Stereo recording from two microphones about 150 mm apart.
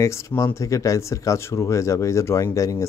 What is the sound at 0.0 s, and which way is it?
Speech, 20° left (ahead or behind).